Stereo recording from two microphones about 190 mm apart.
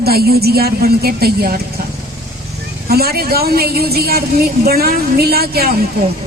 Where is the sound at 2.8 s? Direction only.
55° right (ahead or behind).